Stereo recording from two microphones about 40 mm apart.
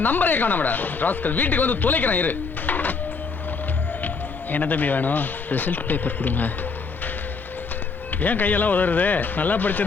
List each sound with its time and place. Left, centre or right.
0.0 s speech: left
4.5 s speech: left
8.2 s speech: left